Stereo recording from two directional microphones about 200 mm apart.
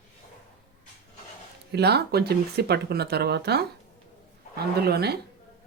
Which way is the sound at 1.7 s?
55° right (ahead or behind).